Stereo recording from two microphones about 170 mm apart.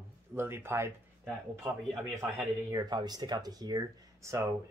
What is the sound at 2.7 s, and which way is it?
Speech, 25° right (ahead or behind).